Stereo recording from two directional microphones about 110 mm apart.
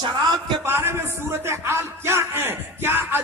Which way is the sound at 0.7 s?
20° right (ahead or behind).